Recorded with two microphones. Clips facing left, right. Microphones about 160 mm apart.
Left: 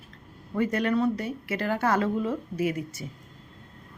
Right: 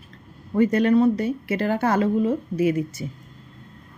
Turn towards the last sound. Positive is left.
turn(degrees=-20)  # may be behind; listen again after turning